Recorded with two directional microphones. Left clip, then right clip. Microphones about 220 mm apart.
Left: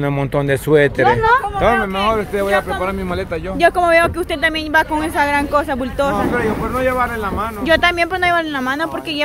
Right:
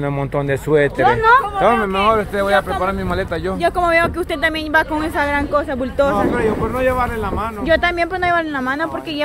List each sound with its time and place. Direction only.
0.4 s speech: 20° left (ahead or behind)
1.0 s speech: 25° right (ahead or behind)
1.6 s speech: centre (ahead or behind)
3.7 s speech: 10° left (ahead or behind)